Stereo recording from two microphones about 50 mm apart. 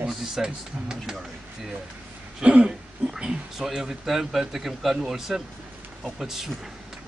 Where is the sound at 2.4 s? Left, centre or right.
Right.